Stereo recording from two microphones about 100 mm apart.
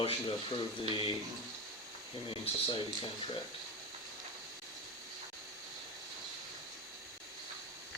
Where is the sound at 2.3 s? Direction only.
60° left (ahead or behind).